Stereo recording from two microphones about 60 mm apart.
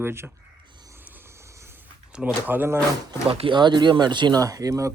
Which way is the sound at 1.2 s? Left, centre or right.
Right.